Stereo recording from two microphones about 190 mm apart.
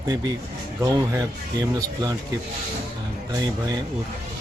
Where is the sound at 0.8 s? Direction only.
15° right (ahead or behind).